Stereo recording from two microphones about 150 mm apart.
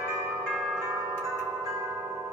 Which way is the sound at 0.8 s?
15° right (ahead or behind).